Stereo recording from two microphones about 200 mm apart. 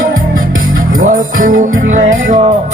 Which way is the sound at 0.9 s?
45° right (ahead or behind).